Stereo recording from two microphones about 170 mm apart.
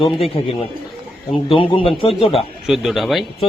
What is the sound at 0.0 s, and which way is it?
A man's voice, 30° left (ahead or behind).